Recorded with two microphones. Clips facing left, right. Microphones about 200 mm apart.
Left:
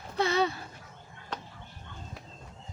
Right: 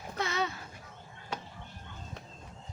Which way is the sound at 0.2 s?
30° left (ahead or behind).